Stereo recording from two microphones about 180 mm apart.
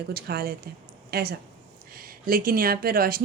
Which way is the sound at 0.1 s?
60° right (ahead or behind).